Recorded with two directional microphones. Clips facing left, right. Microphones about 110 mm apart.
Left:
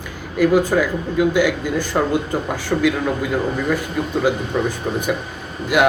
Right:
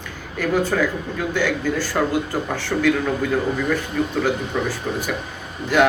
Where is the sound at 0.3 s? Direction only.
10° left (ahead or behind).